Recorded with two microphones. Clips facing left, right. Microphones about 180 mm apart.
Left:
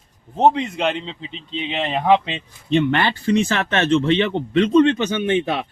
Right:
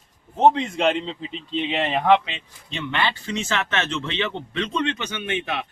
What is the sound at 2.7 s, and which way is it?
Speech, 55° left (ahead or behind).